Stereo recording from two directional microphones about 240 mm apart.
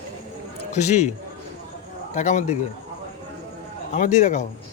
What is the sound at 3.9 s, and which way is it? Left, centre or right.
Speech, left.